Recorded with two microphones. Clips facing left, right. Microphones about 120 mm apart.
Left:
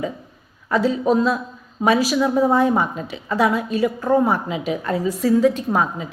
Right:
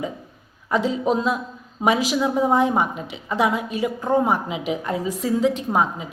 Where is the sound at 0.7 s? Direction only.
15° right (ahead or behind).